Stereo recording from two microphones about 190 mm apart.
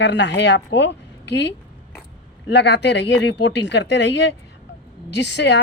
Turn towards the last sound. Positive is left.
turn(degrees=65)  # may be behind; listen again after turning